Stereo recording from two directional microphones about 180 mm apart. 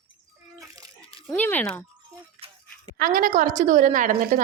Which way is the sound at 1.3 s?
10° left (ahead or behind).